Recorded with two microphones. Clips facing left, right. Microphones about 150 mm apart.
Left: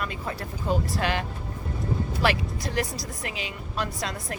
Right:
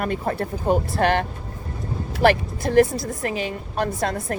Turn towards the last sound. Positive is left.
turn(degrees=-50)  # may be behind; listen again after turning